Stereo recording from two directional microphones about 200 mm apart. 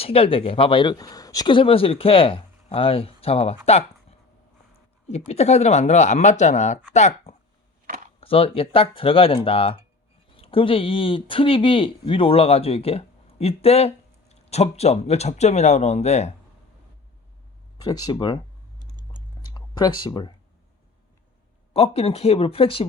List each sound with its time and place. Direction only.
0.0 s speech: 30° left (ahead or behind)
5.0 s speech: 30° left (ahead or behind)
17.7 s speech: 20° left (ahead or behind)
19.4 s a sound: 20° left (ahead or behind)
21.7 s speech: 30° left (ahead or behind)